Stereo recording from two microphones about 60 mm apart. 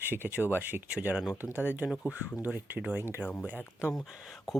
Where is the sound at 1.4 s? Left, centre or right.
Left.